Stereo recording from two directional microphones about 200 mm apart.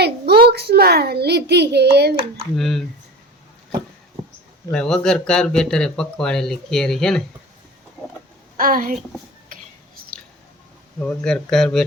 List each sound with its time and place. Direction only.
0.0 s a child's voice: 55° right (ahead or behind)
2.1 s speech: 25° right (ahead or behind)
2.6 s speech: centre (ahead or behind)
4.7 s speech: 5° left (ahead or behind)
8.5 s a child's voice: 45° right (ahead or behind)
11.0 s speech: 5° left (ahead or behind)